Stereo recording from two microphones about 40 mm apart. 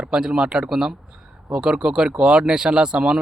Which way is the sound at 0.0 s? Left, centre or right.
Right.